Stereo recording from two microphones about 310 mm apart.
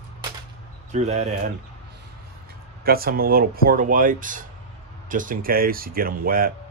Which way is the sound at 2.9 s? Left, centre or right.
Right.